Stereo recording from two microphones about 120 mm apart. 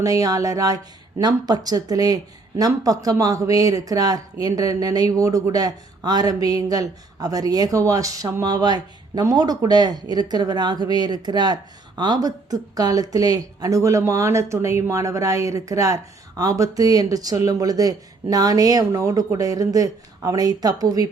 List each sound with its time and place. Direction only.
0.0 s speech: 30° right (ahead or behind)